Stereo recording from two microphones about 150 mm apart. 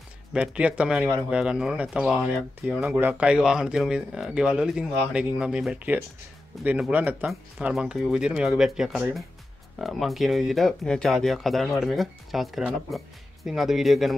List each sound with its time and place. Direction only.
0.3 s speech: 10° right (ahead or behind)